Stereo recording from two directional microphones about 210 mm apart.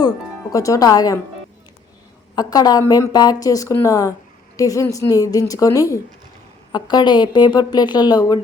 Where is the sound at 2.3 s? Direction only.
20° left (ahead or behind).